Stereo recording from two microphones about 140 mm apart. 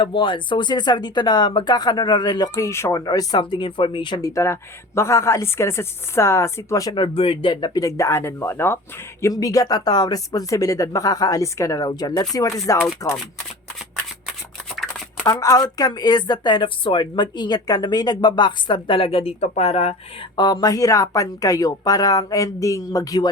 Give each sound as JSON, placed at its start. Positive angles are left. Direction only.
{"t": 0.0, "sound": "speech", "side_deg": 35}
{"t": 4.3, "sound": "speech", "side_deg": 20}
{"t": 15.2, "sound": "speech", "side_deg": 25}
{"t": 20.3, "sound": "speech", "side_deg": 30}